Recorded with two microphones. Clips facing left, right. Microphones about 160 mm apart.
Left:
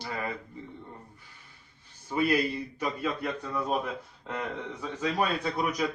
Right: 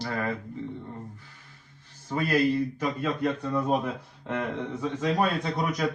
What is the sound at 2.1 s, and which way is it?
Speech, 10° left (ahead or behind).